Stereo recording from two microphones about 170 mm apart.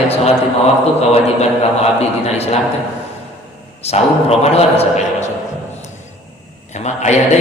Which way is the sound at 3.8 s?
35° left (ahead or behind).